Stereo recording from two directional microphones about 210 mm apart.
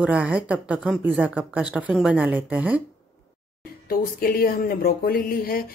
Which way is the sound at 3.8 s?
45° left (ahead or behind).